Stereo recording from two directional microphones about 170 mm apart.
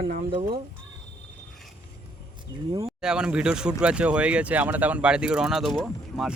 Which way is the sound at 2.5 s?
30° right (ahead or behind).